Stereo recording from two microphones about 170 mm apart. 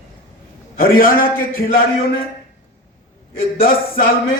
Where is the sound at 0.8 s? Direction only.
60° left (ahead or behind).